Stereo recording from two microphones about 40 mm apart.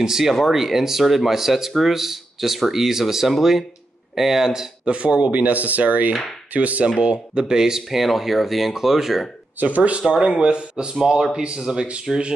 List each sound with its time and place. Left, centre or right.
0.0 s speech: centre
4.8 s speech: right
7.0 s speech: right
8.0 s speech: centre
9.6 s speech: right
10.0 s speech: centre